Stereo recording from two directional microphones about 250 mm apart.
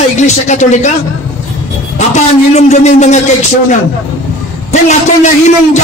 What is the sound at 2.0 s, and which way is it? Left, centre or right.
A man's voice, left.